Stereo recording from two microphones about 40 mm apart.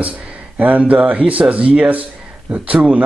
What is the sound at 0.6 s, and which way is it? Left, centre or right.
A man's voice, right.